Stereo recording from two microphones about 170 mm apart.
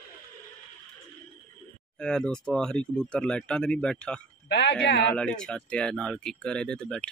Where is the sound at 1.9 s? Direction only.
5° left (ahead or behind).